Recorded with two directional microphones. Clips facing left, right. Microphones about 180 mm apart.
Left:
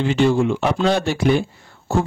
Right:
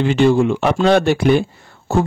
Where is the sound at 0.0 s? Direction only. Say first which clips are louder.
Right 3 dB; 60° right (ahead or behind).